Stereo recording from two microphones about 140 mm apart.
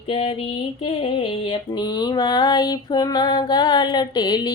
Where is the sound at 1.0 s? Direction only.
35° left (ahead or behind).